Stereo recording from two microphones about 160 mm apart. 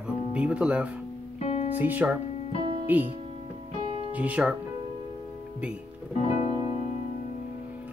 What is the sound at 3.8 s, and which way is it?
Music, 35° right (ahead or behind).